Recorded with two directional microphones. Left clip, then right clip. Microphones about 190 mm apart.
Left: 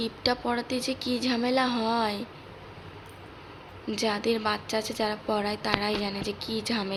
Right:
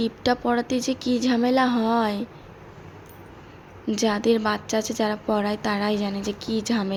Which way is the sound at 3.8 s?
25° right (ahead or behind).